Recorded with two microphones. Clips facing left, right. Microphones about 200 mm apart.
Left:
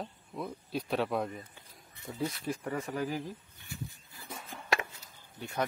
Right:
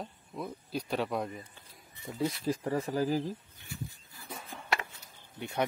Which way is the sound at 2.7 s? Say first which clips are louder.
Right 5 dB; 35° right (ahead or behind).